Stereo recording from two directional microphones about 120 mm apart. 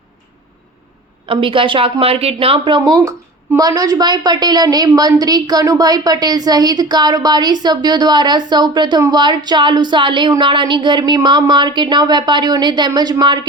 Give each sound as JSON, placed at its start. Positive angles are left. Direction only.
{"t": 1.3, "sound": "a woman's voice", "side_deg": -45}